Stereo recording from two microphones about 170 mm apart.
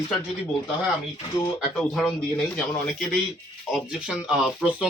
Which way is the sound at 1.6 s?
Centre (ahead or behind).